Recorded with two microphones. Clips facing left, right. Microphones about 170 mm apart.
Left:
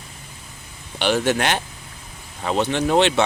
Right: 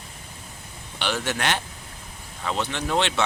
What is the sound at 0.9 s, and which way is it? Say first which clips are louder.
Speech: left 8 dB; 15° left (ahead or behind).